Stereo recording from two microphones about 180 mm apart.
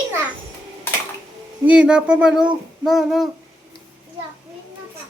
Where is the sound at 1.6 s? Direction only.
5° right (ahead or behind).